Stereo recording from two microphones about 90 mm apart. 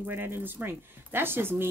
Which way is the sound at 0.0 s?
25° right (ahead or behind).